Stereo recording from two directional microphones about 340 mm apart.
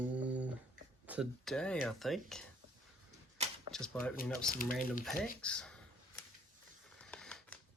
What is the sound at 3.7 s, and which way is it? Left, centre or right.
Speech, centre.